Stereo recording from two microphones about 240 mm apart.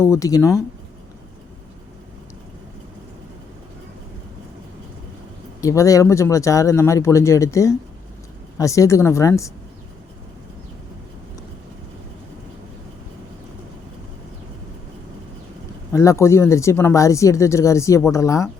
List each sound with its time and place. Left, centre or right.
0.0 s speech: centre
5.5 s speech: centre
15.9 s speech: centre